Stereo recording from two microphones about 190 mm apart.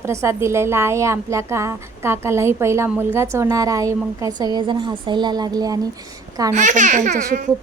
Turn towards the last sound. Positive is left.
turn(degrees=-40)  # may be behind; listen again after turning